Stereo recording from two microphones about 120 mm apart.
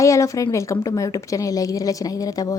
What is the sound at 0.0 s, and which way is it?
A woman's voice, 25° left (ahead or behind).